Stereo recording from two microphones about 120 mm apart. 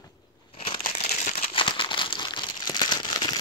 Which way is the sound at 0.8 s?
80° left.